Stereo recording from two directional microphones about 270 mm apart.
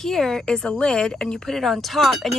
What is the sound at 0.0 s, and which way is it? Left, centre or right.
A woman's voice, centre.